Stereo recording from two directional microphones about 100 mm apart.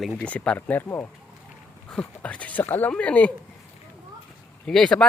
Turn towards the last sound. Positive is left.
turn(degrees=5)  # may be behind; listen again after turning